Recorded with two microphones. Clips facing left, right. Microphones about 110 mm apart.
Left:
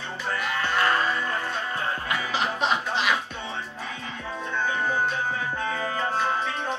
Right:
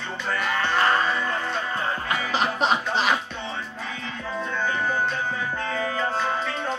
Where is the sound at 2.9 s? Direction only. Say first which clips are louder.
Right 2 dB; 40° right (ahead or behind).